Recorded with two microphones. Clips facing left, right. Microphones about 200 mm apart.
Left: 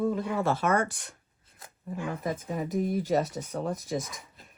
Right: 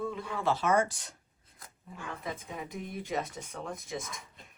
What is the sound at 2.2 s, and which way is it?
Speech, 45° left (ahead or behind).